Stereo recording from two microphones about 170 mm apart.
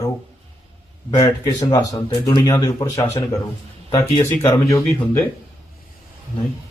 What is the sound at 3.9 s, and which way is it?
Speech, 35° left (ahead or behind).